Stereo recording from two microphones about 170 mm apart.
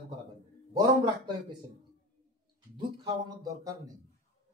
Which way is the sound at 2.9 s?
25° right (ahead or behind).